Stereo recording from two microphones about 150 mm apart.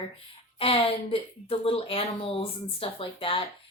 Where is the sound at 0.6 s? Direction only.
40° left (ahead or behind).